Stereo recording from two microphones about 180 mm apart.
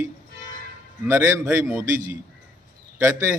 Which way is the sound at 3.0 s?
15° right (ahead or behind).